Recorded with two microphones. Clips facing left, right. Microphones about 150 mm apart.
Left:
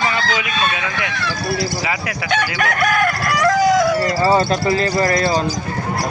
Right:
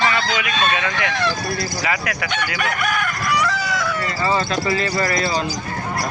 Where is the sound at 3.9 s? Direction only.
35° left (ahead or behind).